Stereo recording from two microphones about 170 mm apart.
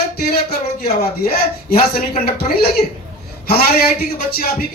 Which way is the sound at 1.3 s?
60° left (ahead or behind).